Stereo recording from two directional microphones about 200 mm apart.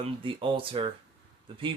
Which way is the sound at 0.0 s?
25° right (ahead or behind).